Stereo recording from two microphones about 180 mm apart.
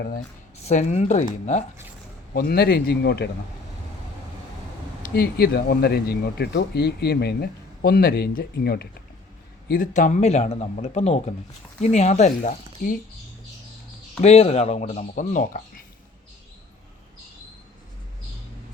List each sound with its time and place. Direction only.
0.6 s speech: 40° left (ahead or behind)
2.3 s speech: 60° left (ahead or behind)
5.0 s speech: 60° left (ahead or behind)
9.6 s speech: 50° left (ahead or behind)
14.2 s speech: 35° left (ahead or behind)